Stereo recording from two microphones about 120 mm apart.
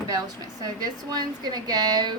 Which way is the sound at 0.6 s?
35° right (ahead or behind).